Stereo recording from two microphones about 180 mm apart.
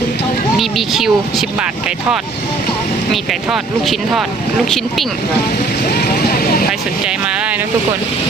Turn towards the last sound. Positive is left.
turn(degrees=55)  # may be behind; listen again after turning